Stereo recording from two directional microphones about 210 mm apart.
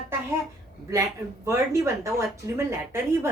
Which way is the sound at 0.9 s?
15° right (ahead or behind).